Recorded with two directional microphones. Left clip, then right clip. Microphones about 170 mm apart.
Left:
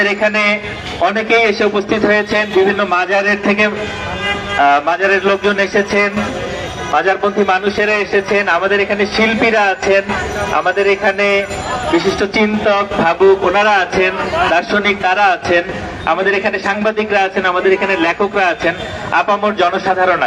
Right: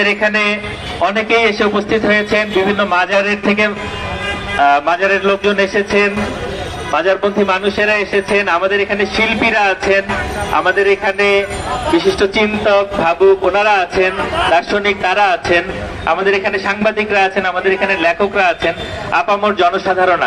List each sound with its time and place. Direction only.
0.0 s a man's voice: 35° right (ahead or behind); by 14.1 s 80° right
14.5 s a man's voice: 90° right
19.1 s a man's voice: 65° right (ahead or behind)